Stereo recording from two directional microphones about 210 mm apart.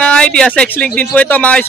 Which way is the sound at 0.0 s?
5° left (ahead or behind).